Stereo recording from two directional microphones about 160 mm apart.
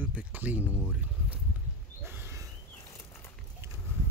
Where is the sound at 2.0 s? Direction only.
15° right (ahead or behind).